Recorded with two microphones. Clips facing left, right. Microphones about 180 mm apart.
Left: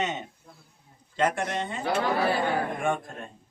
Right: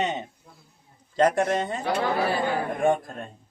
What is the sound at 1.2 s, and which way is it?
Speech, 40° right (ahead or behind).